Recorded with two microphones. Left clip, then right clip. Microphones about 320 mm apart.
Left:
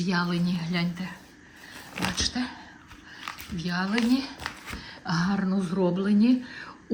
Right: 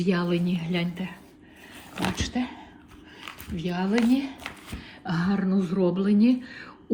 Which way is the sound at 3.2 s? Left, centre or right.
Centre.